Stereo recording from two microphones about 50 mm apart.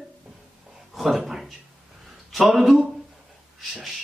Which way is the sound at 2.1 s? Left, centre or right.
Centre.